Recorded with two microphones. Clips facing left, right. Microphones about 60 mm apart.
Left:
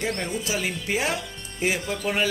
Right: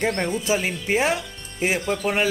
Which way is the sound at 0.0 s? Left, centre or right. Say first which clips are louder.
Right 4 dB; right.